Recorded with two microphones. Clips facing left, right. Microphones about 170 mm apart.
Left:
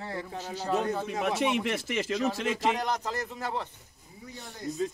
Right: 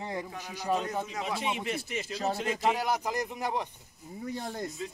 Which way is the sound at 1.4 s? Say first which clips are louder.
Left 5 dB; 80° left.